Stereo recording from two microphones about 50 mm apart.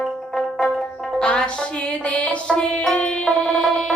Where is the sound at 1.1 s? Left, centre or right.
Centre.